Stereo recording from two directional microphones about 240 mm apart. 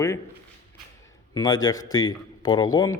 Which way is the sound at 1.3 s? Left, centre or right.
Centre.